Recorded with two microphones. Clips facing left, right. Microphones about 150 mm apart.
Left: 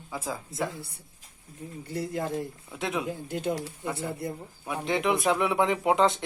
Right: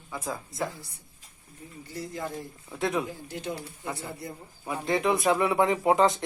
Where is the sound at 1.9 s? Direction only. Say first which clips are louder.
Left 5 dB; 60° left (ahead or behind).